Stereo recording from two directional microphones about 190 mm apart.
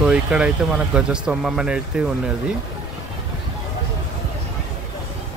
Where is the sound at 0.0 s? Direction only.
5° right (ahead or behind).